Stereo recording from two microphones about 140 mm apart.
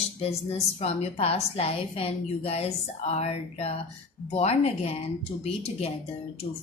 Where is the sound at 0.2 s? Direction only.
50° left (ahead or behind).